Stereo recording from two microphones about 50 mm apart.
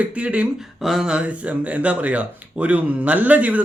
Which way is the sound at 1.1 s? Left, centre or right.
Right.